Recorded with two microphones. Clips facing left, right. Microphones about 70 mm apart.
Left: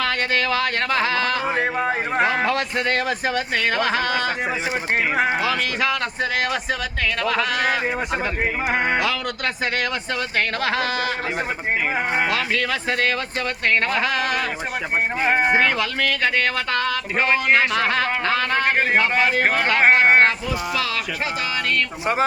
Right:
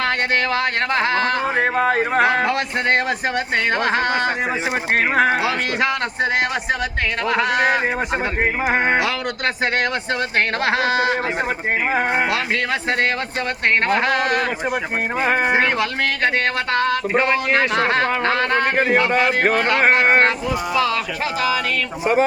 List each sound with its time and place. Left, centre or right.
0.9 s speech: right
1.5 s speech: right
3.5 s speech: right
4.9 s speech: right
7.5 s speech: right
8.8 s speech: right
13.7 s speech: right
15.4 s speech: right
15.6 s speech: right